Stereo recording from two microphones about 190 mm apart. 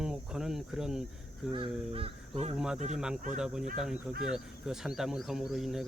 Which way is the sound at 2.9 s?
5° right (ahead or behind).